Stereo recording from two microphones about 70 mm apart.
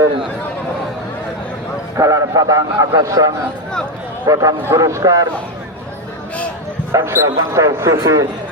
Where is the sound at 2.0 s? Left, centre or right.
Right.